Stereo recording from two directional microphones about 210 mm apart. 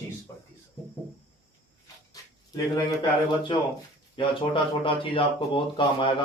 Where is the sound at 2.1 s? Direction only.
15° left (ahead or behind).